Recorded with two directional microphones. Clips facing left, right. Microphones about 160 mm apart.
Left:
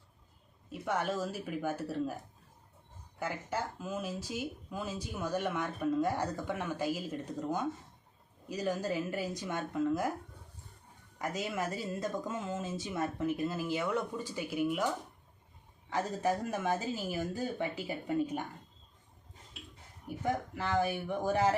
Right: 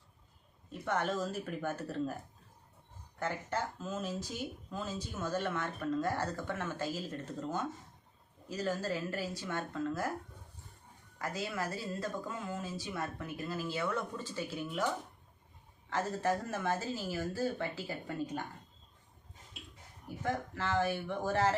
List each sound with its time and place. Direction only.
0.7 s speech: 10° left (ahead or behind)
3.2 s speech: 10° left (ahead or behind)
11.2 s speech: 20° left (ahead or behind)
15.9 s speech: 15° left (ahead or behind)
20.2 s speech: 15° left (ahead or behind)